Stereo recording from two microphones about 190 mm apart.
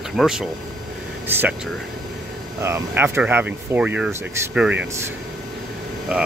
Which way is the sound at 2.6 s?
15° right (ahead or behind).